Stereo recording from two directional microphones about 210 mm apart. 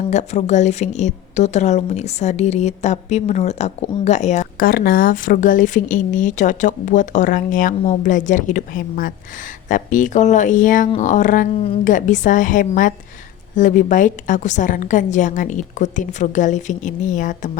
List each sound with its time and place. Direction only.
0.1 s a woman's voice: 35° left (ahead or behind)